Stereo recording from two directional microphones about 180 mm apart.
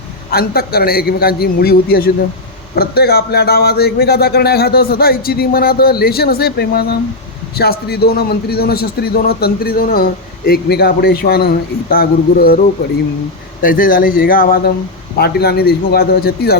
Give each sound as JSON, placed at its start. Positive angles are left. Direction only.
{"t": 0.3, "sound": "a man's voice", "side_deg": 60}